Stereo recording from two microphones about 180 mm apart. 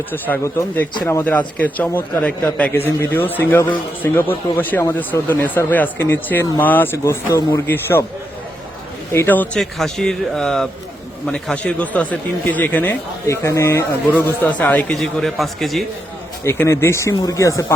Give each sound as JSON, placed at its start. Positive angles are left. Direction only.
{"t": 0.1, "sound": "speech", "side_deg": 15}
{"t": 9.1, "sound": "a man's voice", "side_deg": 10}
{"t": 16.4, "sound": "speech", "side_deg": 15}